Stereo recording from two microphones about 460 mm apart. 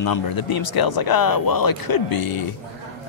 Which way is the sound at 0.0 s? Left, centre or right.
Left.